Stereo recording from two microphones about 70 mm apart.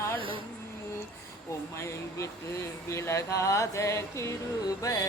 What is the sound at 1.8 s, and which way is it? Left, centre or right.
Speech, left.